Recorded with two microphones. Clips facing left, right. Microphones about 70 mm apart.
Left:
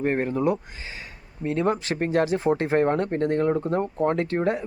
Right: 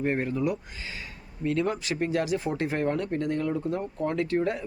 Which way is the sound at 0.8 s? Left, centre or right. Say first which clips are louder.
Left 1 dB; left.